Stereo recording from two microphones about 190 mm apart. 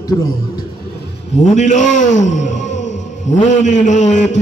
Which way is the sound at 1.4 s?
40° left (ahead or behind).